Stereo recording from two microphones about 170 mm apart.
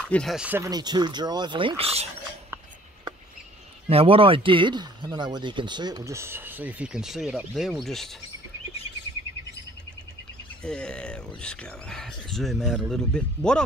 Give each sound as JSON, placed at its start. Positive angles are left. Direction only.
{"t": 0.0, "sound": "speech", "side_deg": 5}
{"t": 0.7, "sound": "speech", "side_deg": -25}
{"t": 3.9, "sound": "speech", "side_deg": -35}
{"t": 10.6, "sound": "speech", "side_deg": 5}